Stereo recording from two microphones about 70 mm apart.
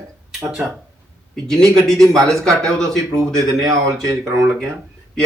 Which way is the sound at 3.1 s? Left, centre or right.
Right.